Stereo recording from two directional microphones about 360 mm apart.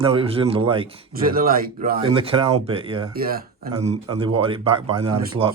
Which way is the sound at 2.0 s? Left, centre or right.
Centre.